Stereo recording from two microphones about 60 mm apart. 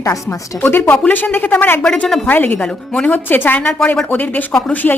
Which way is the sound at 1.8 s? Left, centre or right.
Centre.